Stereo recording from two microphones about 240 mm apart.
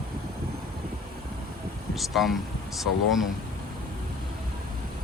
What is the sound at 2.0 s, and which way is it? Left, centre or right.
Speech, centre.